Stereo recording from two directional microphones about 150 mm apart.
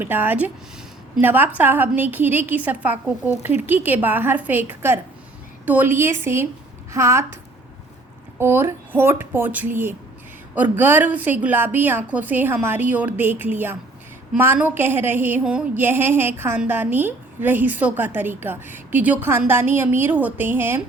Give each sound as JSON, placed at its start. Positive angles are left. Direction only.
{"t": 0.0, "sound": "a woman's voice", "side_deg": -15}
{"t": 8.4, "sound": "a woman's voice", "side_deg": -15}